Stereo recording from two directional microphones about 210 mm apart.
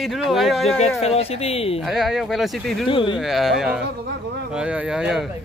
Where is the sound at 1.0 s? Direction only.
30° left (ahead or behind).